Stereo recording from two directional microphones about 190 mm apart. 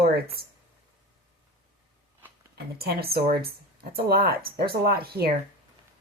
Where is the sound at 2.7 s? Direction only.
55° right (ahead or behind).